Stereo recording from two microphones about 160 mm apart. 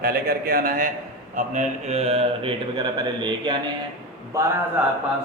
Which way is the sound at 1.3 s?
45° right (ahead or behind).